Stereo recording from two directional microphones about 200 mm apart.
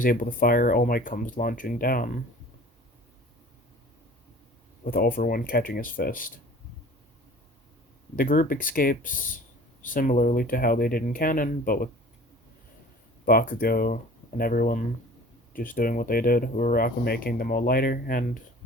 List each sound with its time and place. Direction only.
0.0 s speech: 45° left (ahead or behind)
4.8 s speech: 45° left (ahead or behind)
8.1 s speech: 45° left (ahead or behind)
13.2 s speech: 45° left (ahead or behind)